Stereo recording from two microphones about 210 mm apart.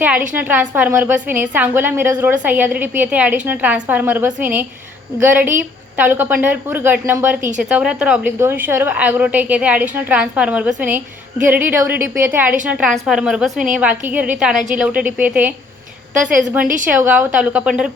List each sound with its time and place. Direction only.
0.0 s a woman's voice: 5° right (ahead or behind)
16.6 s a woman's voice: 40° right (ahead or behind)
16.9 s a woman's voice: 10° right (ahead or behind)